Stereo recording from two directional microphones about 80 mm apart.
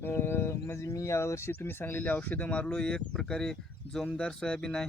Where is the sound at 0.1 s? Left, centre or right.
Left.